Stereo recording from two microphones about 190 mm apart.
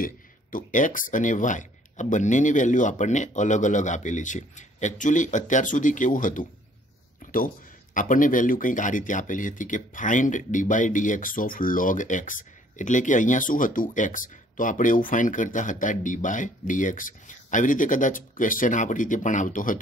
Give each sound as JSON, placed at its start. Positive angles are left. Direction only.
{"t": 0.0, "sound": "speech", "side_deg": 45}
{"t": 7.9, "sound": "speech", "side_deg": 45}